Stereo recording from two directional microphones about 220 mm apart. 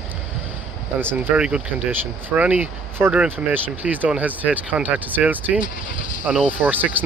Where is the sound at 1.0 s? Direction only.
10° right (ahead or behind).